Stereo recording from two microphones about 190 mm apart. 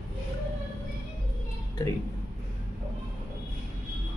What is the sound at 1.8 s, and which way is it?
Speech, 20° left (ahead or behind).